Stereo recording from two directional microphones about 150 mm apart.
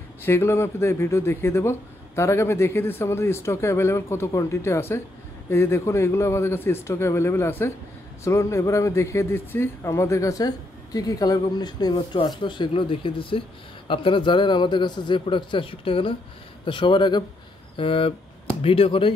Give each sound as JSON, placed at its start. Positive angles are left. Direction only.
{"t": 0.2, "sound": "a man's voice", "side_deg": 15}